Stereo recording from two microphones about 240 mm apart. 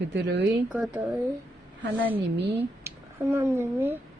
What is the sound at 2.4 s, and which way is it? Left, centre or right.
Speech, right.